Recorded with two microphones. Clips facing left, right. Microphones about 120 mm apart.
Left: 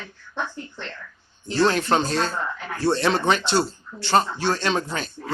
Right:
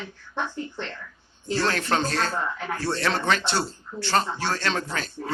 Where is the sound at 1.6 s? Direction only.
20° left (ahead or behind).